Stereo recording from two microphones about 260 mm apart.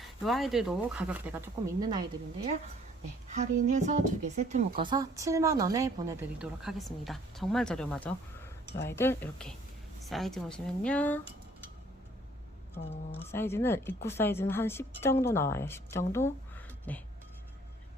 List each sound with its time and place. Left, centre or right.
0.3 s speech: centre
3.3 s a woman's voice: right
4.8 s a woman's voice: centre
13.1 s a woman's voice: centre